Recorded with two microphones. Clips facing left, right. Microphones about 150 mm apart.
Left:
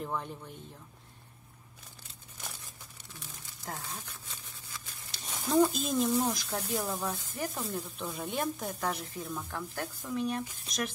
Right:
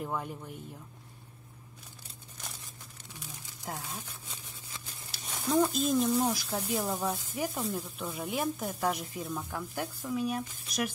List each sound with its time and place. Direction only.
0.0 s speech: 10° right (ahead or behind)
3.6 s speech: 10° right (ahead or behind)
5.1 s speech: centre (ahead or behind)